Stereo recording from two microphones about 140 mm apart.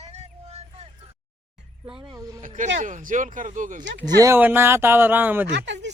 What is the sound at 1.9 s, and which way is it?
Speech, 30° right (ahead or behind).